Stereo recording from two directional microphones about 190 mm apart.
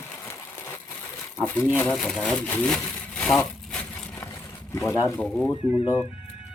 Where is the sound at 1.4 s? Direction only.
10° left (ahead or behind).